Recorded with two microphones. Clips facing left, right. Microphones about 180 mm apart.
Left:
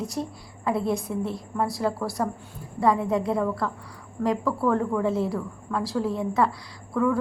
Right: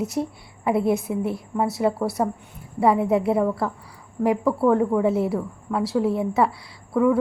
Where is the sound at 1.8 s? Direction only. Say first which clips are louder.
Right 4 dB; 25° right (ahead or behind).